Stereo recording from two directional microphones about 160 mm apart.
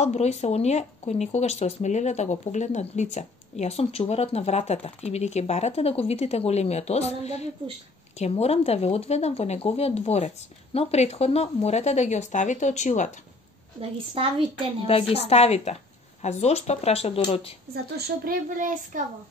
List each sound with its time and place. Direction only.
0.0 s speech: 45° left (ahead or behind)
13.7 s a woman's voice: 35° right (ahead or behind)
14.9 s speech: 40° left (ahead or behind)
17.9 s speech: 65° right (ahead or behind)